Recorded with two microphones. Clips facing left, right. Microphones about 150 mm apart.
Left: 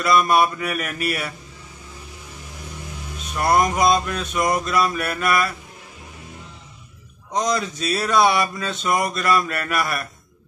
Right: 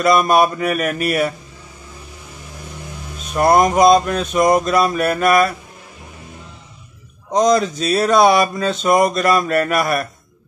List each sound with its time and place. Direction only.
0.0 s speech: 40° right (ahead or behind)
0.6 s mantra: 45° right (ahead or behind)
3.3 s speech: 40° right (ahead or behind)
7.2 s speech: 40° right (ahead or behind)